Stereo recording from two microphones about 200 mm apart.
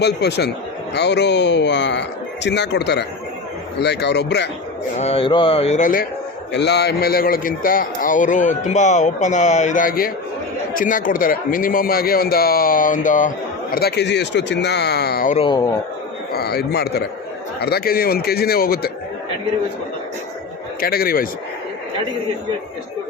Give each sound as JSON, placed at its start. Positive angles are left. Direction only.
{"t": 0.0, "sound": "speech", "side_deg": 55}
{"t": 4.9, "sound": "a man's voice", "side_deg": 30}
{"t": 6.5, "sound": "a man's voice", "side_deg": 60}
{"t": 13.7, "sound": "speech", "side_deg": 55}
{"t": 15.4, "sound": "speech", "side_deg": 20}
{"t": 16.3, "sound": "speech", "side_deg": 50}
{"t": 20.8, "sound": "speech", "side_deg": 50}